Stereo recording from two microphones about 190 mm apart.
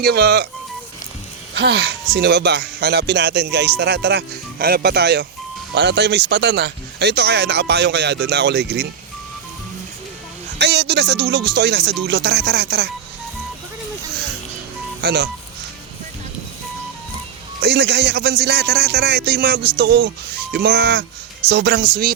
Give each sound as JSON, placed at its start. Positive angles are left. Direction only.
{"t": 0.0, "sound": "speech", "side_deg": -60}
{"t": 1.5, "sound": "speech", "side_deg": -60}
{"t": 10.6, "sound": "speech", "side_deg": -60}
{"t": 15.0, "sound": "speech", "side_deg": -60}
{"t": 17.6, "sound": "speech", "side_deg": -60}